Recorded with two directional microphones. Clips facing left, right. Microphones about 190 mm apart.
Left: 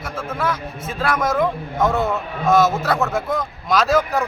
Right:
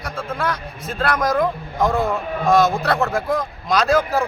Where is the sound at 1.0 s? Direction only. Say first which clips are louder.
Even; 5° left (ahead or behind).